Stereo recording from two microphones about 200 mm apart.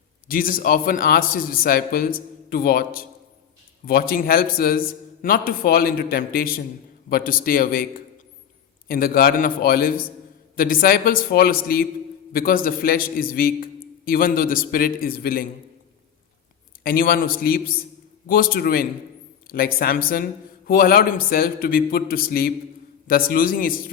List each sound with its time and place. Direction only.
0.3 s a man's voice: 45° left (ahead or behind)
8.9 s a man's voice: 45° left (ahead or behind)
16.8 s a man's voice: 45° left (ahead or behind)